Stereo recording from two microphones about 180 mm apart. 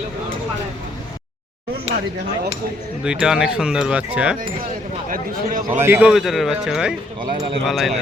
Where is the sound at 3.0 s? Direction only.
5° right (ahead or behind).